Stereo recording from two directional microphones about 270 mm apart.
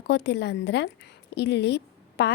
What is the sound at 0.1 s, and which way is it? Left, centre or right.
A woman's voice, left.